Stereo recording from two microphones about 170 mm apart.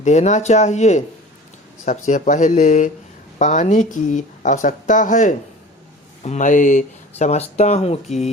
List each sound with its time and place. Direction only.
0.0 s speech: 45° left (ahead or behind)